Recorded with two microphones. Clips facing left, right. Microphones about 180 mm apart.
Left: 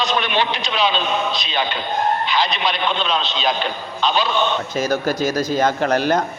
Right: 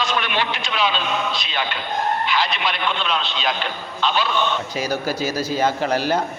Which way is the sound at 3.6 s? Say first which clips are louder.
Left 2 dB; 20° left (ahead or behind).